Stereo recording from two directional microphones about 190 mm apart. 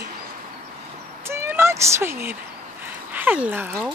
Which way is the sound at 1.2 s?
15° right (ahead or behind).